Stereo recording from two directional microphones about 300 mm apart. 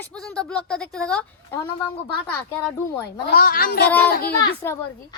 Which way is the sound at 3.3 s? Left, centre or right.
Left.